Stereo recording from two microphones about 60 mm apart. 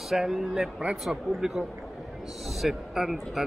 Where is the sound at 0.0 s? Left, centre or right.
Centre.